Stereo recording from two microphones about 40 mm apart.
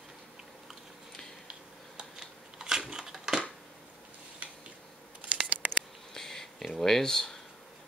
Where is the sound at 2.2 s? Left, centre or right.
Centre.